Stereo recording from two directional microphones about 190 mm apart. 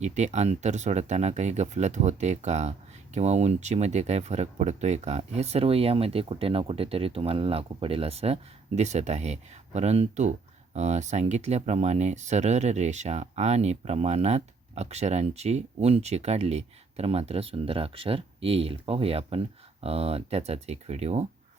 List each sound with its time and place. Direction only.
0.0 s speech: 35° right (ahead or behind)